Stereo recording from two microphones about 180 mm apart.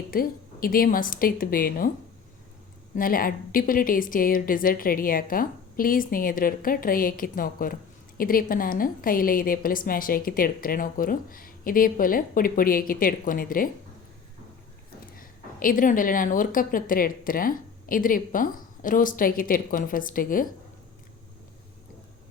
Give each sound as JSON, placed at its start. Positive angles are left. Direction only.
{"t": 0.1, "sound": "a woman's voice", "side_deg": 55}
{"t": 2.9, "sound": "a woman's voice", "side_deg": 50}
{"t": 15.2, "sound": "a woman's voice", "side_deg": 50}